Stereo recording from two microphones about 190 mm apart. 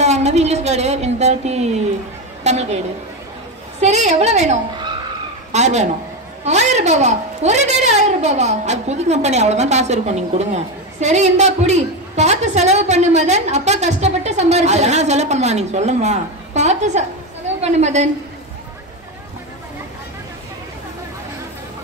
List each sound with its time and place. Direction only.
0.0 s a sound: 35° right (ahead or behind)
2.4 s a woman's voice: 35° right (ahead or behind)
3.8 s a woman's voice: 35° right (ahead or behind)